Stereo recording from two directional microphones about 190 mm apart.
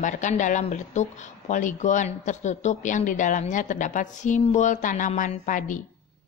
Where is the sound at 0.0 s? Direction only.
40° left (ahead or behind).